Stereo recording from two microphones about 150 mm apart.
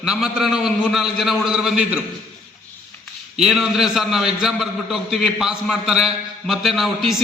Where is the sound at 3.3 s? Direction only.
5° right (ahead or behind).